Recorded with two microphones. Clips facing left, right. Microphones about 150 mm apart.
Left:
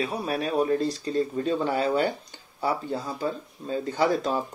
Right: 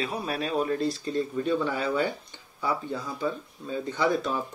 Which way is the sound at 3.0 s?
40° left (ahead or behind).